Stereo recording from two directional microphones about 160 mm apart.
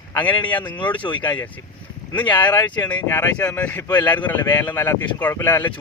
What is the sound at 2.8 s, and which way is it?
Speech, 10° left (ahead or behind).